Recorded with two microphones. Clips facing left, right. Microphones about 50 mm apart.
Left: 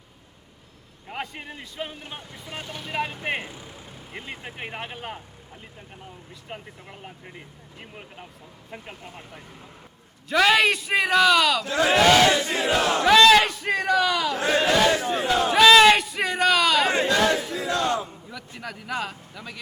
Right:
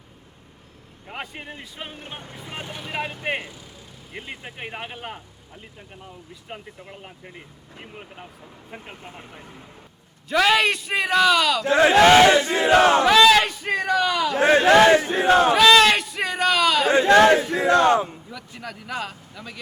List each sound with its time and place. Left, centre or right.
1.0 s speech: centre
1.9 s speech: right
2.7 s speech: centre
3.4 s speech: left
4.1 s speech: centre
6.5 s speech: centre
10.2 s speech: centre
11.6 s battle cry: right
13.1 s a sound: centre
14.3 s battle cry: right
15.5 s a sound: centre
17.1 s battle cry: right
18.6 s speech: centre